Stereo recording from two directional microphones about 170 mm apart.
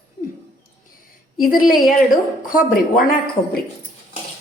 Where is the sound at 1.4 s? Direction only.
55° left (ahead or behind).